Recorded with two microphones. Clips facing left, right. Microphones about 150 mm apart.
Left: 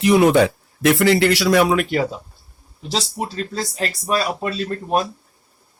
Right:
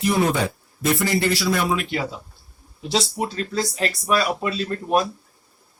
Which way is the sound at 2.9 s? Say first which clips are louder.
Right 1 dB; 35° left (ahead or behind).